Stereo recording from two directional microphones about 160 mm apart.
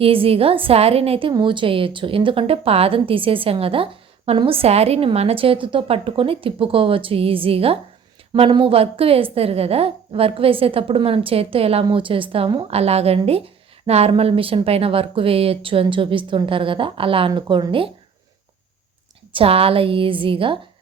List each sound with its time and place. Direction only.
0.0 s a woman's voice: 35° right (ahead or behind)
19.3 s a woman's voice: 35° right (ahead or behind)